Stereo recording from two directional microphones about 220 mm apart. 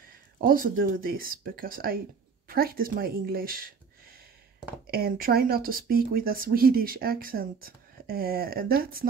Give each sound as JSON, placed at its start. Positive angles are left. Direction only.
{"t": 0.4, "sound": "speech", "side_deg": -40}
{"t": 4.8, "sound": "speech", "side_deg": -45}